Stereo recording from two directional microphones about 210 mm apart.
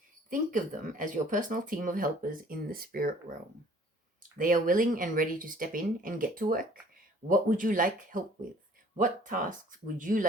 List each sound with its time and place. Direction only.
0.3 s speech: 40° right (ahead or behind)
4.4 s speech: 40° right (ahead or behind)